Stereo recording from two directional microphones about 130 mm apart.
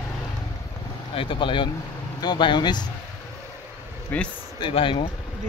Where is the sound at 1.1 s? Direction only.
40° left (ahead or behind).